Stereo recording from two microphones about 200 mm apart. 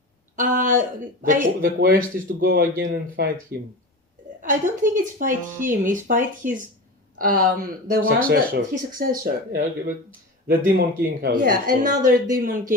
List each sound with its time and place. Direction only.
0.3 s a woman's voice: 40° right (ahead or behind)